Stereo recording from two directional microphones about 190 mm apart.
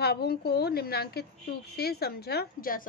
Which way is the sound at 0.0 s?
55° left (ahead or behind).